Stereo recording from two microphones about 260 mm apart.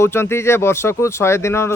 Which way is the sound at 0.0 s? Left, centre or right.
Centre.